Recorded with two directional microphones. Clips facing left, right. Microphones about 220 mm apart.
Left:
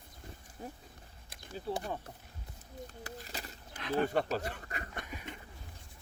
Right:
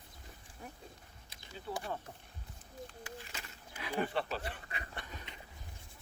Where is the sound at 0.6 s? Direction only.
30° left (ahead or behind).